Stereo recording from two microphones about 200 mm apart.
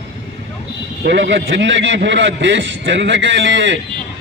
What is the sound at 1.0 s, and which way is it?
A man's voice, 60° right (ahead or behind).